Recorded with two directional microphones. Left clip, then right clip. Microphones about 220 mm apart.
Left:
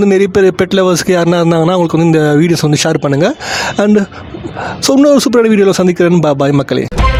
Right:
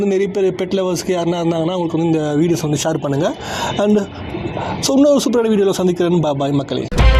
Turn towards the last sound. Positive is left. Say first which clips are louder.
# left 7 dB
turn(degrees=35)  # may be behind; listen again after turning